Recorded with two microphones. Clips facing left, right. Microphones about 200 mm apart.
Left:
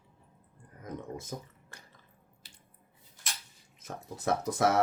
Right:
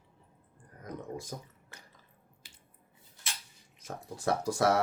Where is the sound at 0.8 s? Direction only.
20° left (ahead or behind).